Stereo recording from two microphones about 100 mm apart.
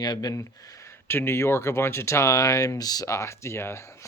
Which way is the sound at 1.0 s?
25° left (ahead or behind).